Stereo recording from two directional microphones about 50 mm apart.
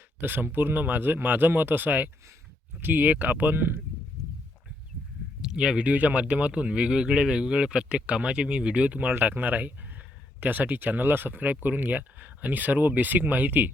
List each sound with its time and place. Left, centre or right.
0.2 s speech: right
3.5 s speech: right
5.4 s speech: centre
5.9 s speech: right